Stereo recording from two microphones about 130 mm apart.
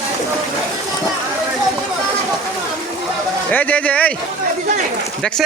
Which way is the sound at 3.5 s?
10° left (ahead or behind).